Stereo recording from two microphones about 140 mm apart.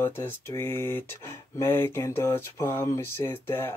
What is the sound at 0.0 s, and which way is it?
Speech, 15° left (ahead or behind).